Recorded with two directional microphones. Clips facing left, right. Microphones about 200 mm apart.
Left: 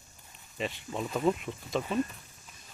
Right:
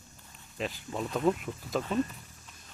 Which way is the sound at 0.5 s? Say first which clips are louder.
Even; centre (ahead or behind).